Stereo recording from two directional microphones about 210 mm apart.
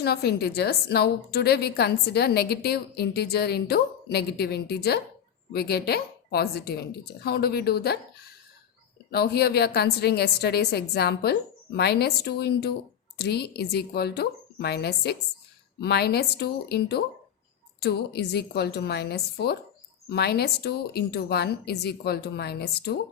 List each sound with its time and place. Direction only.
0.0 s a woman's voice: 50° left (ahead or behind)